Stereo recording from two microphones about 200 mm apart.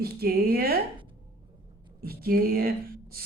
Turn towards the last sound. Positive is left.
turn(degrees=-50)  # may be behind; listen again after turning